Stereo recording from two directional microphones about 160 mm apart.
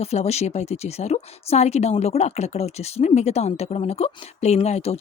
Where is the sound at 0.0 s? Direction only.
40° left (ahead or behind).